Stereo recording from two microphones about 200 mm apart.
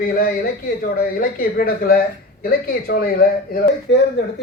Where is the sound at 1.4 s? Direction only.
50° left (ahead or behind).